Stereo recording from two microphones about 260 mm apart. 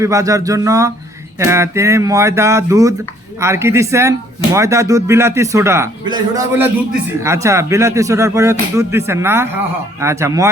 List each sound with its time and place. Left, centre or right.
0.0 s a man's voice: centre